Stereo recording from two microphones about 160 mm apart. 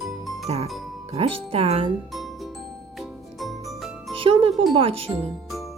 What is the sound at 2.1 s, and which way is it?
Music, centre (ahead or behind).